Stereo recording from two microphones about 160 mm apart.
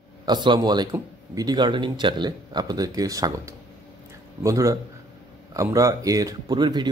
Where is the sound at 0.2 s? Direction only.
25° right (ahead or behind).